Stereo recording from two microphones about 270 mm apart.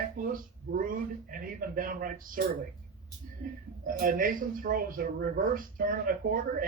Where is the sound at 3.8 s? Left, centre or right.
Right.